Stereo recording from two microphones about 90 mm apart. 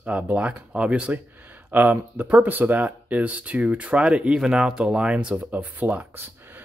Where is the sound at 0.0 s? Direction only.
15° right (ahead or behind).